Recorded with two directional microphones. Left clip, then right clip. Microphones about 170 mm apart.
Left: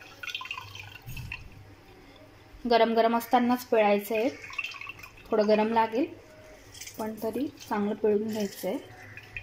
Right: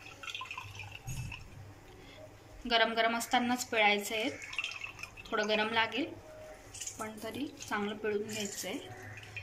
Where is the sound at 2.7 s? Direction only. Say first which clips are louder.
Left 6 dB; 40° left (ahead or behind).